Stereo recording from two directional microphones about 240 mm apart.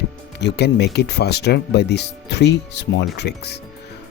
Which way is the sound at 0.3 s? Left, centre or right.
Left.